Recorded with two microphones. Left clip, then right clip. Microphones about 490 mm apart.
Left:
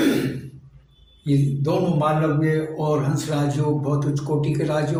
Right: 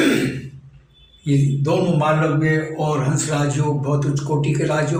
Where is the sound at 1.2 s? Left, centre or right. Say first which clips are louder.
Right 2 dB; left.